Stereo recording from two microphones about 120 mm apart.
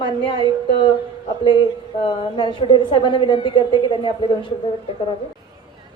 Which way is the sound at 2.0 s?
45° left (ahead or behind).